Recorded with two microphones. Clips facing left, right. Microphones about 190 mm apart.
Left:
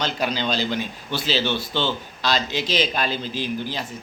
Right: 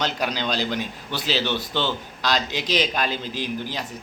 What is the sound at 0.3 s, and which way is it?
A man's voice, 15° right (ahead or behind).